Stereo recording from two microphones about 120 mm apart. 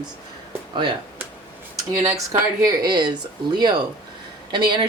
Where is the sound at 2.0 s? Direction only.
25° right (ahead or behind).